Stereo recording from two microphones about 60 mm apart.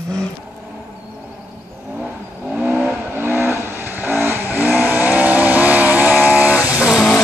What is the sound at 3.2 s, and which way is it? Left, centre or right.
Vehicle, right.